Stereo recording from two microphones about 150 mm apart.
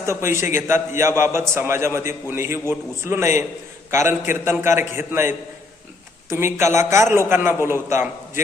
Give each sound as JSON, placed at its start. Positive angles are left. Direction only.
{"t": 0.0, "sound": "a man's voice", "side_deg": -20}
{"t": 6.3, "sound": "a man's voice", "side_deg": -15}